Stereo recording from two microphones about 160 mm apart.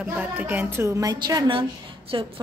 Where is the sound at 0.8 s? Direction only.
20° right (ahead or behind).